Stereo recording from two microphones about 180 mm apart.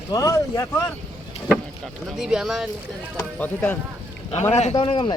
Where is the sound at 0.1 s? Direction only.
20° left (ahead or behind).